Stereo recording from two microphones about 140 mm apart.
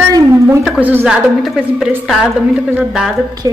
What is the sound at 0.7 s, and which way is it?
A woman's voice, 10° right (ahead or behind).